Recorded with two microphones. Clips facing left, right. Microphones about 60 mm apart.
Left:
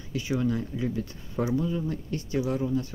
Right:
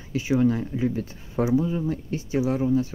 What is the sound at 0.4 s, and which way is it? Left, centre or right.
Speech, right.